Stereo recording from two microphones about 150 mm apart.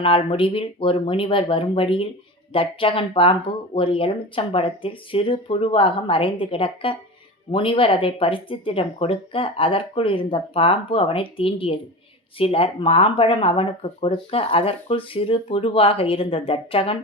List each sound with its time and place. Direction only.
0.0 s speech: 35° left (ahead or behind)